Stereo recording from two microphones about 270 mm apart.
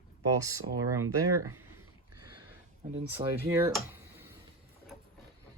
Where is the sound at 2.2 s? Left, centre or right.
Centre.